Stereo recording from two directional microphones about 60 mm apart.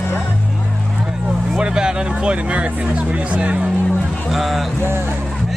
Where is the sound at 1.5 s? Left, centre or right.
Centre.